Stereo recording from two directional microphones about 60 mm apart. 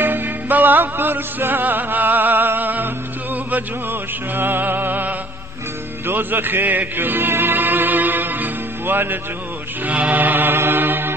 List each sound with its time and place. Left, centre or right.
0.0 s music: right
4.4 s mantra: right
6.0 s music: right
9.8 s mantra: right